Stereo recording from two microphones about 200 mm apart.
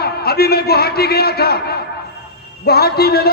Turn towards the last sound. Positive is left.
turn(degrees=50)  # may be behind; listen again after turning